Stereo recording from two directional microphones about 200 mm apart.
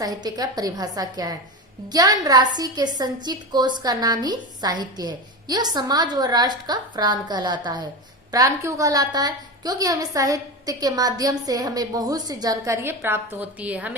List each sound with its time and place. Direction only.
0.0 s a woman's voice: 20° right (ahead or behind)